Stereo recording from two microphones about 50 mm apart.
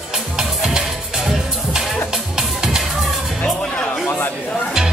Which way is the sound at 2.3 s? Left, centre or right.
Centre.